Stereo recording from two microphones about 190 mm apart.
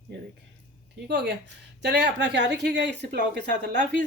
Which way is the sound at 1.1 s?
65° right (ahead or behind).